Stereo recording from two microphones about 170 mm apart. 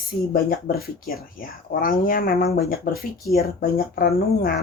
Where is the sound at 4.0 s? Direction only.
60° left (ahead or behind).